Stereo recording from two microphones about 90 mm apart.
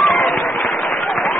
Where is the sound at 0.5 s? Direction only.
15° left (ahead or behind).